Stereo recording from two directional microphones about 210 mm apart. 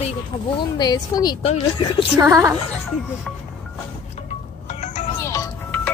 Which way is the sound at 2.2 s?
15° right (ahead or behind).